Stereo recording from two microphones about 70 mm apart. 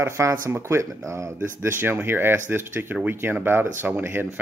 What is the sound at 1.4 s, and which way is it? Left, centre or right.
Speech, right.